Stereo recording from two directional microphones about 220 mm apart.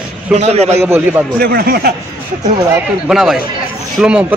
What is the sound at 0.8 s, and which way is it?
Speech, 10° right (ahead or behind).